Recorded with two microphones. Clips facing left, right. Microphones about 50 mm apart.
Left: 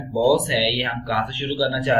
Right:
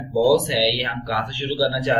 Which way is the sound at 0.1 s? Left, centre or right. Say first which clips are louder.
Right 1 dB; centre.